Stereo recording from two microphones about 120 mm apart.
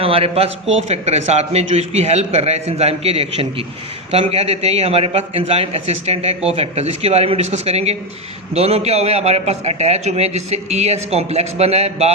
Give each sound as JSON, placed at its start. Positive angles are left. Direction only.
{"t": 0.0, "sound": "a man's voice", "side_deg": -55}